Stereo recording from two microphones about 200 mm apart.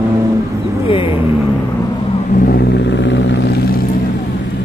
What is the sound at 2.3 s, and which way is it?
Vehicle, 45° left (ahead or behind).